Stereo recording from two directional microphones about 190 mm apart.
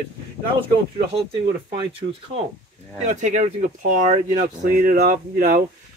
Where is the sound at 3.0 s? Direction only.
40° right (ahead or behind).